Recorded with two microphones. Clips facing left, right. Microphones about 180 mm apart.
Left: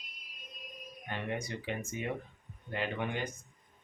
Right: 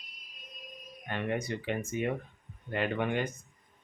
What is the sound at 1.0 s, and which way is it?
Speech, 60° right (ahead or behind).